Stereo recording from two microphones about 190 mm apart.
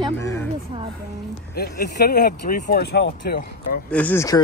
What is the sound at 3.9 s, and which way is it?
Speech, 10° left (ahead or behind).